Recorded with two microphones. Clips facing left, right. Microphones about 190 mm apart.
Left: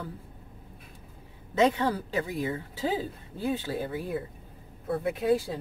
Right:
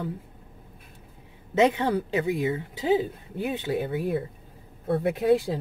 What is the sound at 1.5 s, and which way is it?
Speech, 20° right (ahead or behind).